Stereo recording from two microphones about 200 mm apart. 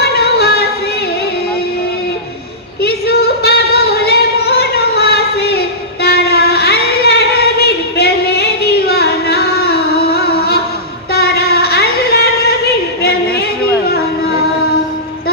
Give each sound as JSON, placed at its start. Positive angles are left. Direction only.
{"t": 0.0, "sound": "yodeling", "side_deg": 50}
{"t": 2.8, "sound": "singing", "side_deg": 55}
{"t": 11.1, "sound": "a sound", "side_deg": 50}